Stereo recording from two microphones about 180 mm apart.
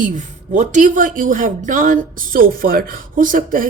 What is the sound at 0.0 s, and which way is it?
A woman's voice, 45° right (ahead or behind).